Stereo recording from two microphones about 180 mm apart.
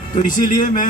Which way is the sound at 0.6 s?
45° left (ahead or behind).